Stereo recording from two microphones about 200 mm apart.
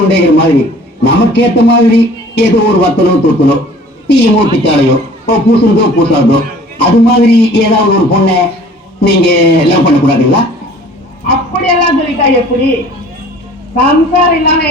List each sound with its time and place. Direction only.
0.1 s a man's voice: 55° left (ahead or behind)
13.8 s a man's voice: 55° left (ahead or behind)